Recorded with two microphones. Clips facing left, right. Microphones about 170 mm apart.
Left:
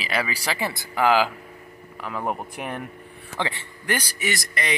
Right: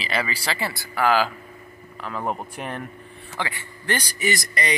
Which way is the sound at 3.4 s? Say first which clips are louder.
Left 2 dB; 20° left (ahead or behind).